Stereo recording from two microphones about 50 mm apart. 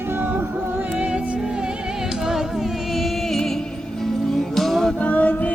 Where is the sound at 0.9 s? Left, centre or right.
Right.